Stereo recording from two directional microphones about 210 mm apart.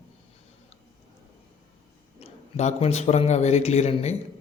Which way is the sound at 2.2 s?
30° left (ahead or behind).